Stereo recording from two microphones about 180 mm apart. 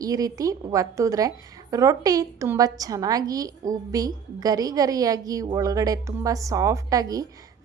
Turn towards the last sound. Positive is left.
turn(degrees=-20)  # may be behind; listen again after turning